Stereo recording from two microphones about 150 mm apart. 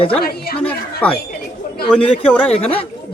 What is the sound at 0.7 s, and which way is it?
Speech, 10° left (ahead or behind).